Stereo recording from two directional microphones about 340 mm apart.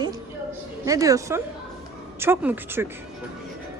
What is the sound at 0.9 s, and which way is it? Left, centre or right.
Speech, centre.